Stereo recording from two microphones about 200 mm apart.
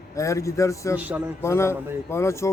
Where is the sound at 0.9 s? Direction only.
5° right (ahead or behind).